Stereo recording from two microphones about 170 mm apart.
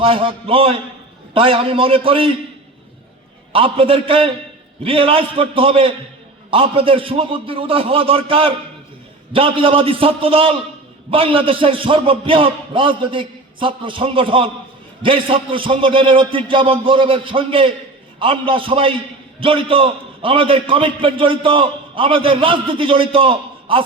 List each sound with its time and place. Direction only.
0.0 s a man's voice: 30° right (ahead or behind)
3.5 s a man's voice: 30° right (ahead or behind)